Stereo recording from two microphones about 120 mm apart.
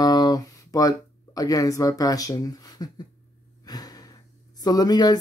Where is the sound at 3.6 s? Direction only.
35° left (ahead or behind).